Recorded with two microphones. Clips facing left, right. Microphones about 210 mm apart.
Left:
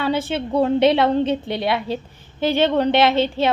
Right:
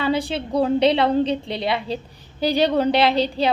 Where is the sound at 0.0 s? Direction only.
Centre (ahead or behind).